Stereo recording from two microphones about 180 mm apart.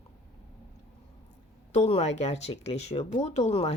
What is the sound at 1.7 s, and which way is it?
A woman's voice, 40° left (ahead or behind).